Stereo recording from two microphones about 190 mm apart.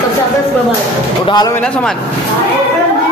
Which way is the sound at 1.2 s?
20° left (ahead or behind).